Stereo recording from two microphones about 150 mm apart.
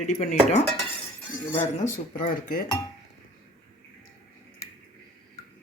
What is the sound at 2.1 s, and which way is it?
Speech, 65° left (ahead or behind).